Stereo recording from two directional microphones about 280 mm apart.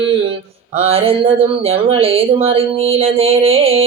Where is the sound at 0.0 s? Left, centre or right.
Centre.